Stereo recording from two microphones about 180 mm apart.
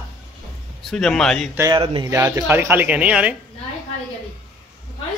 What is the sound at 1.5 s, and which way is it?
Speech, 15° right (ahead or behind).